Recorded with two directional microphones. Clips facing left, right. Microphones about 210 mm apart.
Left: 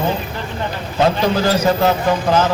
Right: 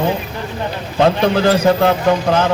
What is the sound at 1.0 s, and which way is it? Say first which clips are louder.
A man's voice: right 2 dB; 55° right (ahead or behind).